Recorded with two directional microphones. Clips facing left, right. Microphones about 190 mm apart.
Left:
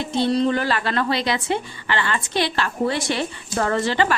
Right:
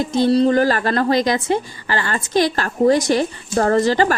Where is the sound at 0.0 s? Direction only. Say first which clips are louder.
Right 5 dB; 40° right (ahead or behind).